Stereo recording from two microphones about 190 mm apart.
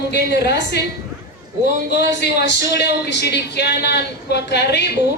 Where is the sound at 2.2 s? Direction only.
60° left (ahead or behind).